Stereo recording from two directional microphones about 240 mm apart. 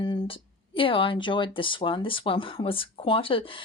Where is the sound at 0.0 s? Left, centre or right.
Centre.